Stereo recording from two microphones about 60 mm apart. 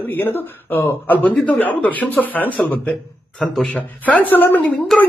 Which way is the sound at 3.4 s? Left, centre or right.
Centre.